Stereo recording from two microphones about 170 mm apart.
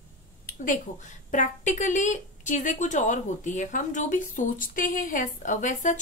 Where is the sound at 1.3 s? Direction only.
45° left (ahead or behind).